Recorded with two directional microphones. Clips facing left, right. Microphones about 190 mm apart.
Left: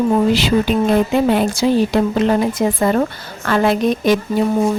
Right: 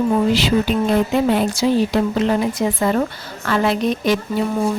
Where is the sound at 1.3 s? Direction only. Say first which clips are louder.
Left 2 dB; 60° left (ahead or behind).